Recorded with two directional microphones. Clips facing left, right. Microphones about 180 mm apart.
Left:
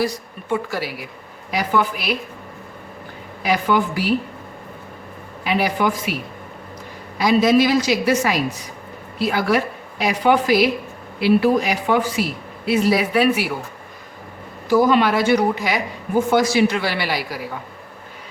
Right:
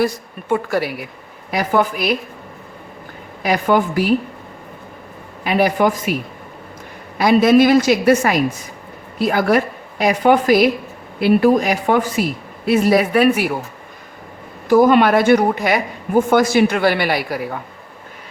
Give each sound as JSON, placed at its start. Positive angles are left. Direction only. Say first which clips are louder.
{"t": 0.0, "sound": "speech", "louder": "right 4 dB", "side_deg": -55}
{"t": 3.4, "sound": "speech", "louder": "right 3 dB", "side_deg": -45}
{"t": 5.4, "sound": "speech", "louder": "right 4 dB", "side_deg": -50}
{"t": 7.2, "sound": "speech", "louder": "right 4 dB", "side_deg": -55}
{"t": 14.7, "sound": "speech", "louder": "right 4 dB", "side_deg": -55}